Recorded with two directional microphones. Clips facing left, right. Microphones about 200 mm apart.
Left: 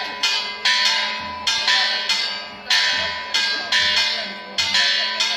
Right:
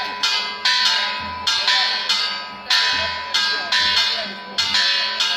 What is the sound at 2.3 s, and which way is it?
Music, 25° left (ahead or behind).